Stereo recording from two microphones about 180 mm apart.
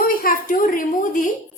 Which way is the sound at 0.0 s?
55° left (ahead or behind).